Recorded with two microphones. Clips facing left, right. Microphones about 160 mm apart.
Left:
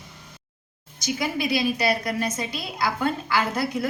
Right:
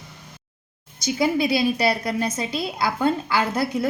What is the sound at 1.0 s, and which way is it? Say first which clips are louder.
A woman's voice: right 5 dB; 30° right (ahead or behind).